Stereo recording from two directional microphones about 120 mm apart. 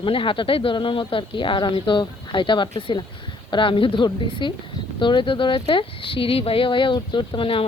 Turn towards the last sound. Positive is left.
turn(degrees=50)  # may be behind; listen again after turning